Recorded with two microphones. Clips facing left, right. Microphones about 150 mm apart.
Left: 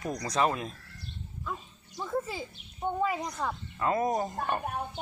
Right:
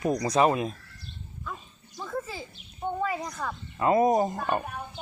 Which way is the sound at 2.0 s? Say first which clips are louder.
Left 2 dB; 15° left (ahead or behind).